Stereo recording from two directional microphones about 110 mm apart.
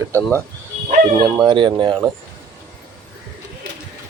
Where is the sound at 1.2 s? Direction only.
40° right (ahead or behind).